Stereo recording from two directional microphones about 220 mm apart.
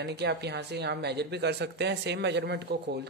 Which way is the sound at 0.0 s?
50° right (ahead or behind).